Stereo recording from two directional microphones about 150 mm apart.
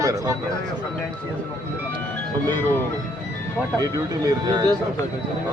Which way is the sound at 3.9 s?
25° right (ahead or behind).